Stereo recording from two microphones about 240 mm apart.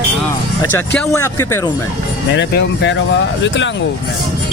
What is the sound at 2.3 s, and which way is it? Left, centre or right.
Speech, left.